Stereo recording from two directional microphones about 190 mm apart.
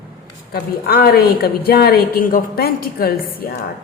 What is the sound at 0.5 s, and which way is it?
A woman's voice, 55° left (ahead or behind).